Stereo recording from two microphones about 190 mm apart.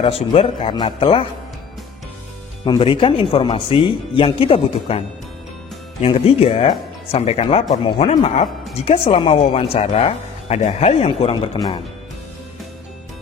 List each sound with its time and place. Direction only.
0.0 s speech: 30° left (ahead or behind)
2.6 s speech: 25° left (ahead or behind)
6.0 s speech: 30° left (ahead or behind)